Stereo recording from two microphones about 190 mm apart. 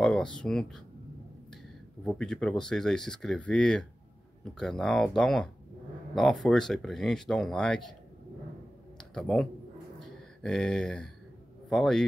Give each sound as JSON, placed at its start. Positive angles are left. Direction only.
{"t": 0.0, "sound": "a sound", "side_deg": 5}
{"t": 0.4, "sound": "speech", "side_deg": 5}
{"t": 2.0, "sound": "speech", "side_deg": 5}
{"t": 9.1, "sound": "speech", "side_deg": 5}
{"t": 9.9, "sound": "a sound", "side_deg": 5}
{"t": 11.7, "sound": "speech", "side_deg": 0}